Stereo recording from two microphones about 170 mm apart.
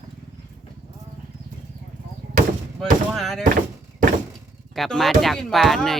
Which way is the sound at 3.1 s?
Centre (ahead or behind).